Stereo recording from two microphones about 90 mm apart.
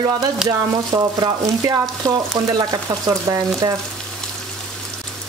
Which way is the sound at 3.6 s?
55° right (ahead or behind).